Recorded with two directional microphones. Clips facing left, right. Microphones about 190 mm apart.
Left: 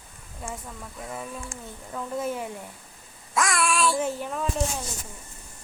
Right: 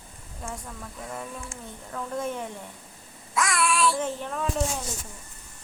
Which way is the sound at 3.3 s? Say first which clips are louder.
Left 1 dB; 45° left (ahead or behind).